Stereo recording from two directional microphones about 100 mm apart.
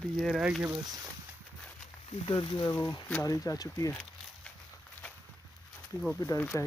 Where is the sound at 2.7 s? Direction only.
30° left (ahead or behind).